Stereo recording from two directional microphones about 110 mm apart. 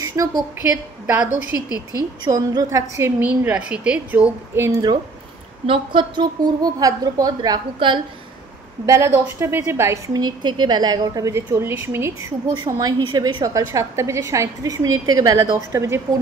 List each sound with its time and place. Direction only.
0.0 s a sound: 30° right (ahead or behind)
0.6 s a woman's voice: 20° right (ahead or behind)
1.9 s a woman's voice: 35° right (ahead or behind)
3.2 s a woman's voice: 15° right (ahead or behind)
4.6 s a woman's voice: 25° right (ahead or behind)
5.7 s a woman's voice: 50° right (ahead or behind)
8.8 s a woman's voice: 25° right (ahead or behind)
10.1 s a woman's voice: 40° right (ahead or behind)